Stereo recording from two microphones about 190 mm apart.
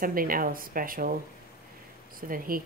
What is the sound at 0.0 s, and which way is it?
Speech, 50° right (ahead or behind).